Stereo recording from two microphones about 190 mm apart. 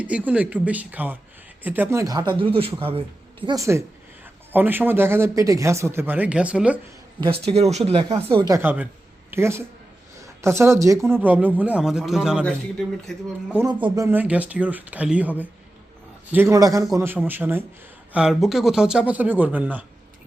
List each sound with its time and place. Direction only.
0.0 s speech: 5° right (ahead or behind); by 2.7 s 30° right (ahead or behind)
3.4 s speech: 15° right (ahead or behind)
7.2 s speech: 30° right (ahead or behind)
8.5 s speech: 10° right (ahead or behind)
13.8 s speech: 15° right (ahead or behind)